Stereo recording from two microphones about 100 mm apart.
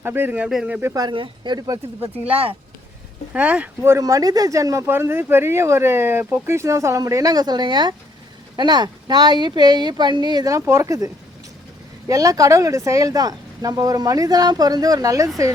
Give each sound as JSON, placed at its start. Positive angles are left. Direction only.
{"t": 0.0, "sound": "speech", "side_deg": -20}
{"t": 1.1, "sound": "speech", "side_deg": -55}
{"t": 1.5, "sound": "speech", "side_deg": -35}
{"t": 2.0, "sound": "speech", "side_deg": -75}
{"t": 3.3, "sound": "speech", "side_deg": -15}
{"t": 3.8, "sound": "speech", "side_deg": -30}
{"t": 4.9, "sound": "speech", "side_deg": -25}
{"t": 10.4, "sound": "speech", "side_deg": -30}